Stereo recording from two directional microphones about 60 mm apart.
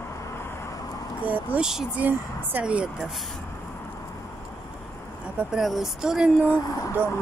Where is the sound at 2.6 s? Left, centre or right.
Centre.